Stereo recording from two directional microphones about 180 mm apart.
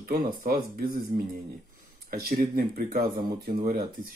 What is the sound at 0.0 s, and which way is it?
Speech, 55° right (ahead or behind).